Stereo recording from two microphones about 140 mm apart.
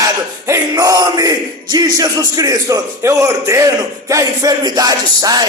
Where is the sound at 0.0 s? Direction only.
20° right (ahead or behind).